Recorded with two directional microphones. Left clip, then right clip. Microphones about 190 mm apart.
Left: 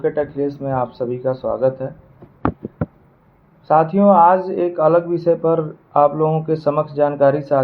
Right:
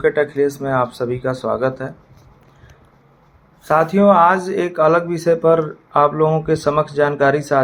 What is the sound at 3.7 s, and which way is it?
Speech, 20° right (ahead or behind).